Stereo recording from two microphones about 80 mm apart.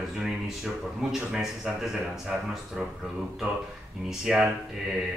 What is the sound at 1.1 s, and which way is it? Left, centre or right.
Speech, centre.